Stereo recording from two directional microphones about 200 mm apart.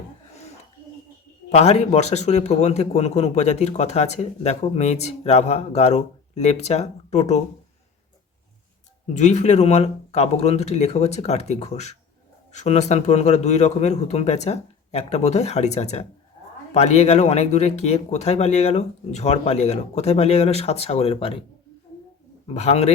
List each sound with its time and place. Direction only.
1.5 s speech: 35° left (ahead or behind)
9.1 s speech: 35° left (ahead or behind)
22.4 s speech: 30° left (ahead or behind)